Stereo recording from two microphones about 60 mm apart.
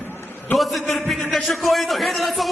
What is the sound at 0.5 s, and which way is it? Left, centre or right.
Speech, centre.